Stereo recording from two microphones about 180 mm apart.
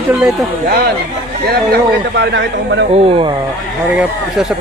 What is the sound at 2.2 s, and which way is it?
Speech, 75° right (ahead or behind).